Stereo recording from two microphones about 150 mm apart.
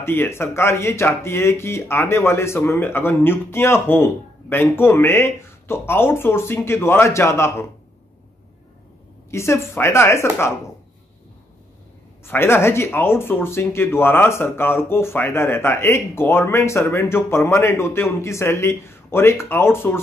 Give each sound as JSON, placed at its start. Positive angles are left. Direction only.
{"t": 0.0, "sound": "speech", "side_deg": 15}
{"t": 9.3, "sound": "speech", "side_deg": 20}
{"t": 12.3, "sound": "speech", "side_deg": 15}